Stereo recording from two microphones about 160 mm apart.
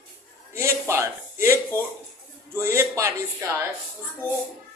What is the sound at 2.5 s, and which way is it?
Speech, 15° right (ahead or behind).